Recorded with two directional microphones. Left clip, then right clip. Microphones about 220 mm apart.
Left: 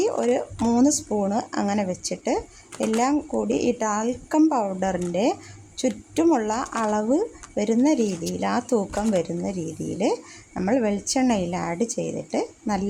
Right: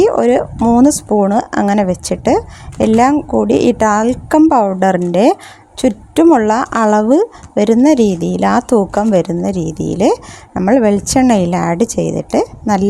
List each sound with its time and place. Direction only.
0.0 s speech: 35° right (ahead or behind)